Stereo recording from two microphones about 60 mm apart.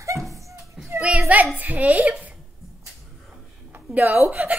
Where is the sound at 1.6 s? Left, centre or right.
Right.